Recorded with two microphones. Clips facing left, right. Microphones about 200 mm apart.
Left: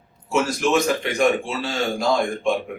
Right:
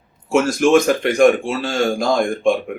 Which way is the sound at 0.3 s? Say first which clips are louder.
Right 6 dB; 50° right (ahead or behind).